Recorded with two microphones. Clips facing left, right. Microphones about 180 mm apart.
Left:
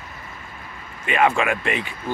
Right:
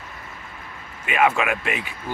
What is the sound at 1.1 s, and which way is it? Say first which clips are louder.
Speech: left 1 dB; 5° right (ahead or behind).